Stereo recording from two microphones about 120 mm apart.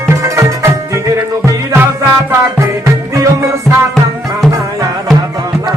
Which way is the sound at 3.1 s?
25° right (ahead or behind).